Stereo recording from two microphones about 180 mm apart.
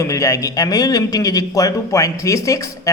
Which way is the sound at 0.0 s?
15° left (ahead or behind).